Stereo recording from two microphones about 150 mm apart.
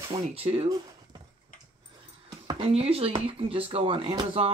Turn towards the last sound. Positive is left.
turn(degrees=-40)  # may be behind; listen again after turning